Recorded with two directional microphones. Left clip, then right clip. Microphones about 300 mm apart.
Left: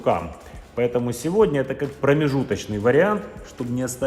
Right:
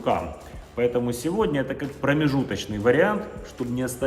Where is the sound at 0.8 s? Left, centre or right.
Left.